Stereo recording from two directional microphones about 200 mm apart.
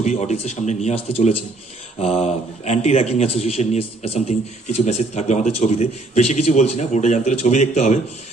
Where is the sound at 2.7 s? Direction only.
35° left (ahead or behind).